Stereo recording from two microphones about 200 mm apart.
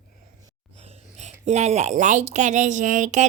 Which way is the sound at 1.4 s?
35° right (ahead or behind).